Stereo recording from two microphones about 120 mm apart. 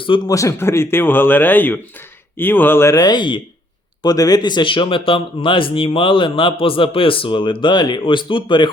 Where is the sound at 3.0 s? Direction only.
35° left (ahead or behind).